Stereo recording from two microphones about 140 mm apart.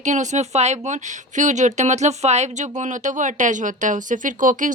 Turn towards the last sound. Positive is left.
turn(degrees=-70)  # may be behind; listen again after turning